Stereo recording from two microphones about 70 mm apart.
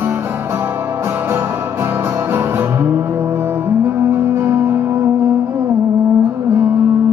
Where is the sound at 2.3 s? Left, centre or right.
Right.